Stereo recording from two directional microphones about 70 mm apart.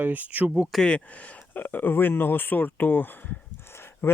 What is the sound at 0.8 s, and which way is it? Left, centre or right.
Speech, centre.